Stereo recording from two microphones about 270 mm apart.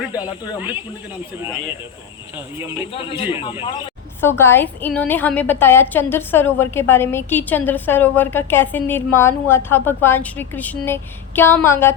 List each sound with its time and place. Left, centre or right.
0.0 s speech: centre
2.8 s a man's voice: centre
4.2 s a woman's voice: centre